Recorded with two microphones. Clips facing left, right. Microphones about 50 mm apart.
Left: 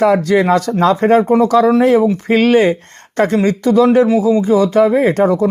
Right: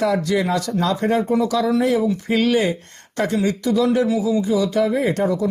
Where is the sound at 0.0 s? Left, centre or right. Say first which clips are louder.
Left 7 dB; left.